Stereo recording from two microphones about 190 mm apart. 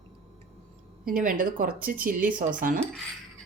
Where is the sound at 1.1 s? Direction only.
45° right (ahead or behind).